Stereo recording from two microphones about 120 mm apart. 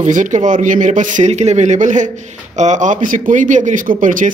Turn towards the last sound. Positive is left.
turn(degrees=-90)